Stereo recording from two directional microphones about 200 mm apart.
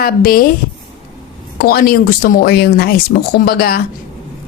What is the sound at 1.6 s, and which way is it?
A woman's voice, 50° left (ahead or behind).